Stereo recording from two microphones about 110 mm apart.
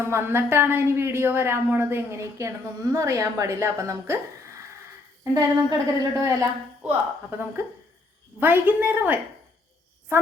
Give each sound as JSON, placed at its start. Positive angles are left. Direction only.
{"t": 0.0, "sound": "a woman's voice", "side_deg": -20}
{"t": 5.2, "sound": "a woman's voice", "side_deg": -30}
{"t": 7.3, "sound": "a woman's voice", "side_deg": -20}